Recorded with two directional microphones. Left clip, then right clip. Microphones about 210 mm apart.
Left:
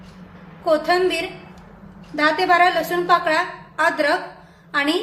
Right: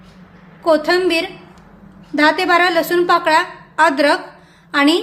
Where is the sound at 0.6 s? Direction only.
50° right (ahead or behind).